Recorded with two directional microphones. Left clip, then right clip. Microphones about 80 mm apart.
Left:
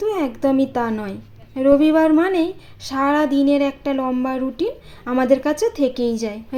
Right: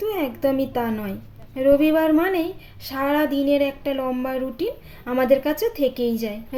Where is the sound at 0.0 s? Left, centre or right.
Left.